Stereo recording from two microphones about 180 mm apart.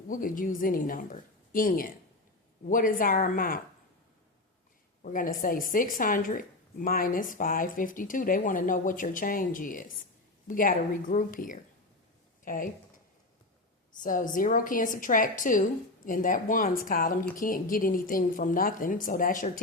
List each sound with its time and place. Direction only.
0.1 s a woman's voice: 50° left (ahead or behind)
5.0 s a woman's voice: 50° left (ahead or behind)
14.0 s a woman's voice: 45° left (ahead or behind)